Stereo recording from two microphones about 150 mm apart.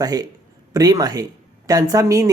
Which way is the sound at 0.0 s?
25° right (ahead or behind).